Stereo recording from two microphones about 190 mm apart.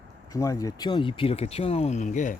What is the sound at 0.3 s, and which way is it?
Speech, 15° left (ahead or behind).